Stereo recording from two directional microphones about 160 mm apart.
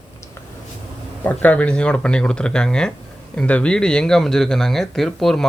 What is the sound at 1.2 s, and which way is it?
Speech, 10° left (ahead or behind).